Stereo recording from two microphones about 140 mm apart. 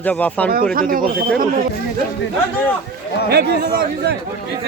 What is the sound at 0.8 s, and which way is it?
Speech, 90° right.